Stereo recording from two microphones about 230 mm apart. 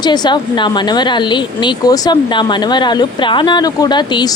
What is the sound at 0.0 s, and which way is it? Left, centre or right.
A woman's voice, centre.